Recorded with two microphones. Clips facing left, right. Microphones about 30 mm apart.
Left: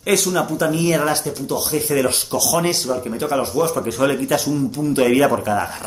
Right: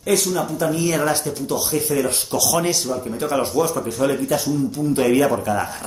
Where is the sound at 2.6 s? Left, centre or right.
Centre.